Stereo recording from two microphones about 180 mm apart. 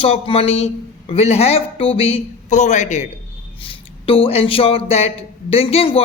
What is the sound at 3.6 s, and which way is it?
A man's voice, 30° left (ahead or behind).